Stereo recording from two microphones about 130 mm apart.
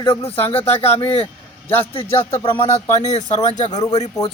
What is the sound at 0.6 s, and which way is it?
Speech, 15° left (ahead or behind).